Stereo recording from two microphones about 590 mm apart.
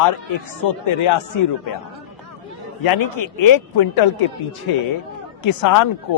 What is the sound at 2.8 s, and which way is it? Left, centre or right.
A man's voice, left.